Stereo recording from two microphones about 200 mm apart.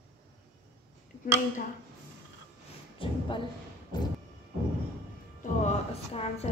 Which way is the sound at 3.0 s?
25° left (ahead or behind).